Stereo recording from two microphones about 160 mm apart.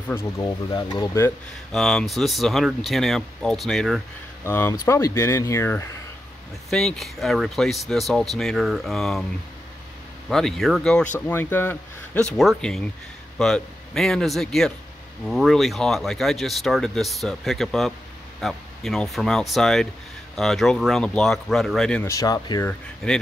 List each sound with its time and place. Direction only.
0.4 s speech: 25° left (ahead or behind)
1.7 s speech: centre (ahead or behind)
4.5 s speech: 15° left (ahead or behind)
6.7 s speech: centre (ahead or behind)
10.3 s speech: centre (ahead or behind)
22.0 s speech: 20° left (ahead or behind)
23.0 s speech: 5° left (ahead or behind)